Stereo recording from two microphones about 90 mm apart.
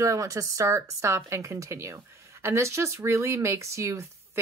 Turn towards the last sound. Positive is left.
turn(degrees=-35)  # may be behind; listen again after turning